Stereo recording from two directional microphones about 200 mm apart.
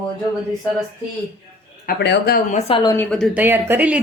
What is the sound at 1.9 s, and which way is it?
Speech, 60° left (ahead or behind).